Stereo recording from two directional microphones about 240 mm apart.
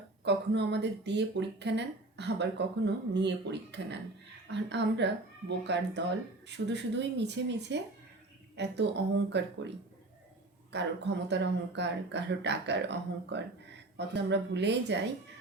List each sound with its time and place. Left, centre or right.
0.3 s speech: right